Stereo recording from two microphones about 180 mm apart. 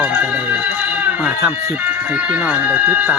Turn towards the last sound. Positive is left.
turn(degrees=-10)  # may be behind; listen again after turning